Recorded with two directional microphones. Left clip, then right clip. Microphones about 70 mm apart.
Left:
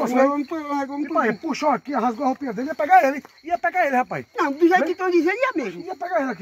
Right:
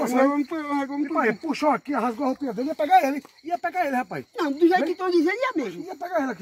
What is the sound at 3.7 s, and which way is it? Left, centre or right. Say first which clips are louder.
Speech: left 6 dB; left.